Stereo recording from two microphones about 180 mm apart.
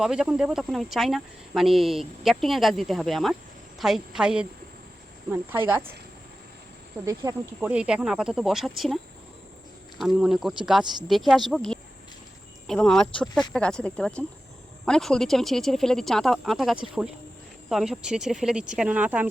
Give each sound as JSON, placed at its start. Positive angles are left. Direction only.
{"t": 0.0, "sound": "speech", "side_deg": -5}
{"t": 7.0, "sound": "speech", "side_deg": -20}
{"t": 7.7, "sound": "speech", "side_deg": -5}
{"t": 10.0, "sound": "speech", "side_deg": 0}